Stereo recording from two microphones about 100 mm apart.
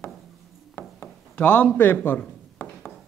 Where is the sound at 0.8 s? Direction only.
20° left (ahead or behind).